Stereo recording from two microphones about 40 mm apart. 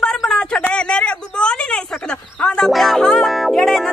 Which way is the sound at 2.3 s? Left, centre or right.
Left.